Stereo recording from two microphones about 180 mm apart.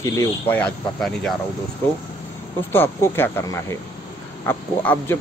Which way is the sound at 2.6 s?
10° left (ahead or behind).